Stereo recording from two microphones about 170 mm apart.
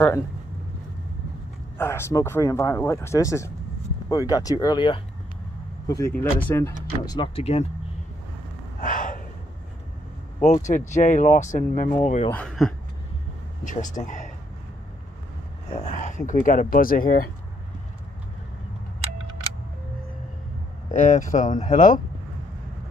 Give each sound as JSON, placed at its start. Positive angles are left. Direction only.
{"t": 1.8, "sound": "speech", "side_deg": 15}
{"t": 5.9, "sound": "speech", "side_deg": 20}
{"t": 7.1, "sound": "speech", "side_deg": 30}
{"t": 8.8, "sound": "gasp", "side_deg": 50}
{"t": 10.4, "sound": "speech", "side_deg": 45}
{"t": 12.3, "sound": "speech", "side_deg": 5}
{"t": 13.7, "sound": "speech", "side_deg": 50}
{"t": 15.7, "sound": "speech", "side_deg": 45}
{"t": 21.0, "sound": "speech", "side_deg": 50}